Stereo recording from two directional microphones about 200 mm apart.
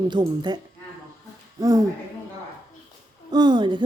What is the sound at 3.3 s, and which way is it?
Speech, 20° right (ahead or behind).